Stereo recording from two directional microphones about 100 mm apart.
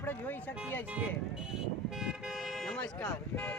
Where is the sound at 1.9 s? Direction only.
5° right (ahead or behind).